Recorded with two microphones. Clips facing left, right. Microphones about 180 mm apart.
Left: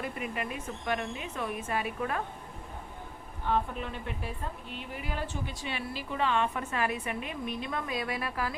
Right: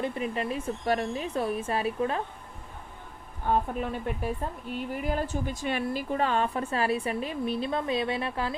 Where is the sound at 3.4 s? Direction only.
45° right (ahead or behind).